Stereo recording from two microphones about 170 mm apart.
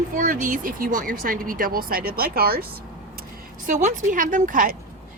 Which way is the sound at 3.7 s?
45° right (ahead or behind).